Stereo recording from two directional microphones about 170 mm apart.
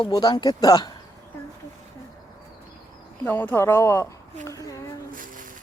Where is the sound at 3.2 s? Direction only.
10° left (ahead or behind).